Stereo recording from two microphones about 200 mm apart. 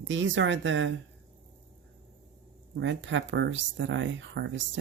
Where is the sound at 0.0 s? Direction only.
70° right (ahead or behind).